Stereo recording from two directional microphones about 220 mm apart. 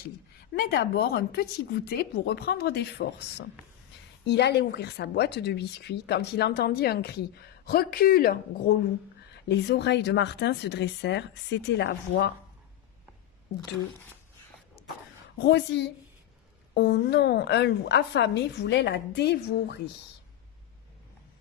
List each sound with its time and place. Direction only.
0.6 s speech: 45° left (ahead or behind)
14.8 s a sound: 50° left (ahead or behind)
15.3 s speech: 50° left (ahead or behind)